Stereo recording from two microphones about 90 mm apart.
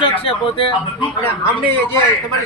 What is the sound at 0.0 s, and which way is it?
Speech, 80° left.